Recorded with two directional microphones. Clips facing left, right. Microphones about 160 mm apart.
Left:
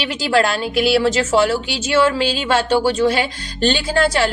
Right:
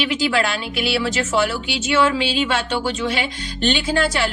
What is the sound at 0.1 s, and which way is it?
A woman's voice, 40° left (ahead or behind).